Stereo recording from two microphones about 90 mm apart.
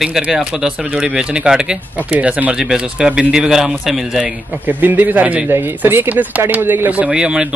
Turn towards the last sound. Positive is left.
turn(degrees=-10)  # may be behind; listen again after turning